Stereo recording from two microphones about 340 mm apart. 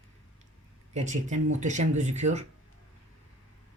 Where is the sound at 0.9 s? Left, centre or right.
Right.